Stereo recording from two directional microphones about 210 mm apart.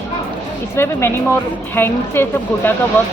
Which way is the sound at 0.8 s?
10° left (ahead or behind).